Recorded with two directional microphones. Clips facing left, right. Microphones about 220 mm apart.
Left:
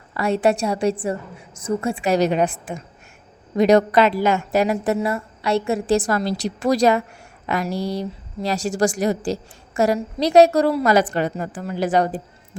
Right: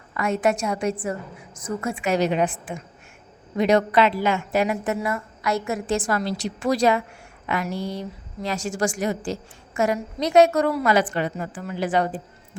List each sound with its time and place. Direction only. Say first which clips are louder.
0.1 s a woman's voice: left 3 dB; 35° left (ahead or behind)